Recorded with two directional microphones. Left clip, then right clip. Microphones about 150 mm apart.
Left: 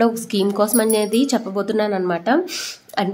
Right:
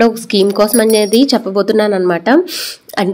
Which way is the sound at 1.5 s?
40° right (ahead or behind).